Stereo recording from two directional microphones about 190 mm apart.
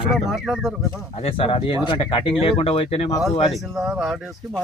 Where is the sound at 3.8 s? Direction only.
Centre (ahead or behind).